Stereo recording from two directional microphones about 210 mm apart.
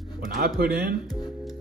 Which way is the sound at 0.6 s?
50° right (ahead or behind).